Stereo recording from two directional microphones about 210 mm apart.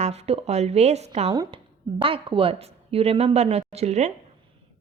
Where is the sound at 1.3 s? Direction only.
20° right (ahead or behind).